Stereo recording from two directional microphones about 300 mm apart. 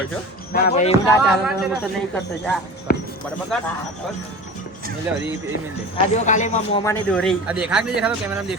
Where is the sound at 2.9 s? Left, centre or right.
Left.